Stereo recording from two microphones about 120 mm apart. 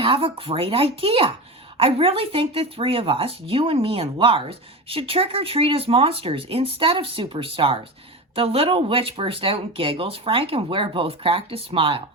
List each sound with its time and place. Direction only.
0.0 s speech: 50° right (ahead or behind)